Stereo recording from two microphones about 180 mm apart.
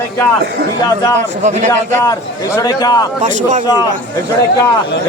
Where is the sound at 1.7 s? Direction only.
15° left (ahead or behind).